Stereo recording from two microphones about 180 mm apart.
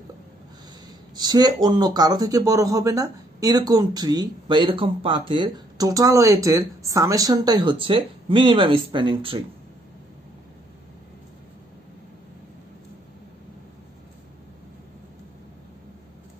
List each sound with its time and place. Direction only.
1.1 s speech: 20° right (ahead or behind)